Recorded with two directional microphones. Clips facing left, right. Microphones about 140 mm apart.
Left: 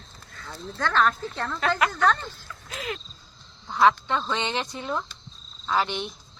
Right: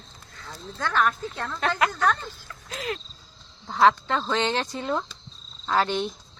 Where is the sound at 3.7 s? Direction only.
35° right (ahead or behind).